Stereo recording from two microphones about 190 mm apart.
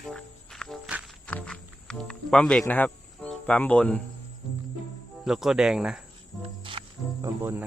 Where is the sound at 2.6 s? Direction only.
10° left (ahead or behind).